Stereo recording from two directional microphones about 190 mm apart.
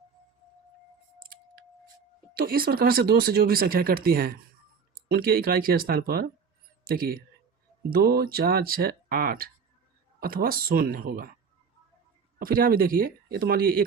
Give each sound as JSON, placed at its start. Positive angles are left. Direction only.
{"t": 2.3, "sound": "speech", "side_deg": -50}
{"t": 12.4, "sound": "speech", "side_deg": -50}